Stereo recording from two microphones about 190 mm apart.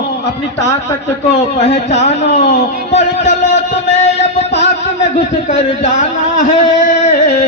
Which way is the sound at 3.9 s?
35° left (ahead or behind).